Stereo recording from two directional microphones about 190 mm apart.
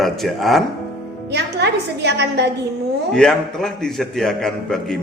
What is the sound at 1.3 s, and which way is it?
A woman's voice, 65° right (ahead or behind).